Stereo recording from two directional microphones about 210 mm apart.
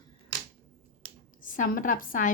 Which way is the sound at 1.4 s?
40° left (ahead or behind).